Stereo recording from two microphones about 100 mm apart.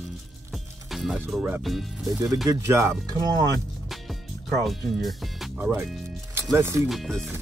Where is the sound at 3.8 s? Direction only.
Centre (ahead or behind).